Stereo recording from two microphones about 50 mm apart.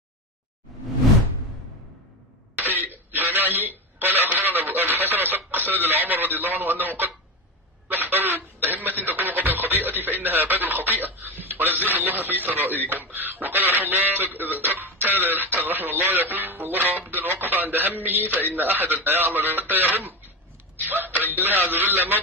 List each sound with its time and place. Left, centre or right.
0.7 s whoosh: centre
2.5 s throat clearing: right
7.9 s music: right
11.3 s a man's voice: right